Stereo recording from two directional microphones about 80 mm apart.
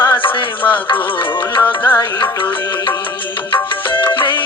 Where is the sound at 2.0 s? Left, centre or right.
Left.